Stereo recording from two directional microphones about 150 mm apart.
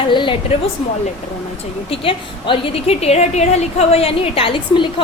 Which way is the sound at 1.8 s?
35° left (ahead or behind).